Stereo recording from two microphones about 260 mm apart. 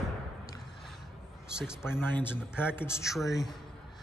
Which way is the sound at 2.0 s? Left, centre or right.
Centre.